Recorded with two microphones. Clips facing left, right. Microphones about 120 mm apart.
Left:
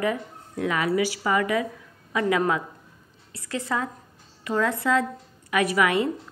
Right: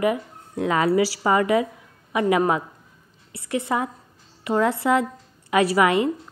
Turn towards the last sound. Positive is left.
turn(degrees=-25)  # may be behind; listen again after turning